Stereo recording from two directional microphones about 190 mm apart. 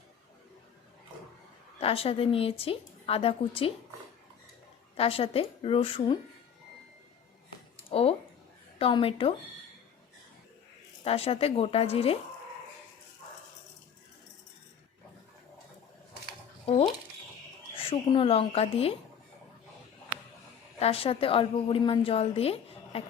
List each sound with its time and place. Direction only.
1.8 s a woman's voice: 30° left (ahead or behind)
4.9 s a woman's voice: 30° left (ahead or behind)
7.9 s a woman's voice: 30° left (ahead or behind)
11.0 s a woman's voice: 30° left (ahead or behind)
17.7 s a woman's voice: 30° left (ahead or behind)
20.7 s a woman's voice: 30° left (ahead or behind)